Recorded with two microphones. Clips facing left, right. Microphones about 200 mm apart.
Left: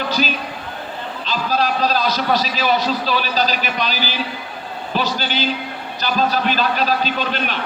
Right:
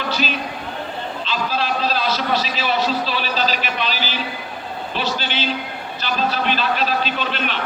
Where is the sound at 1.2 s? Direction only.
40° left (ahead or behind).